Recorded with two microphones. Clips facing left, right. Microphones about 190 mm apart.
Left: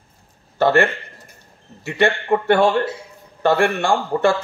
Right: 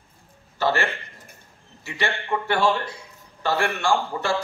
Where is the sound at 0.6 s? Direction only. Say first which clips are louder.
Left 8 dB; 55° left (ahead or behind).